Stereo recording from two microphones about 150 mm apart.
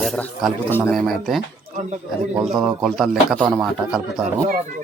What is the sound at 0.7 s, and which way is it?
Speech, 15° left (ahead or behind).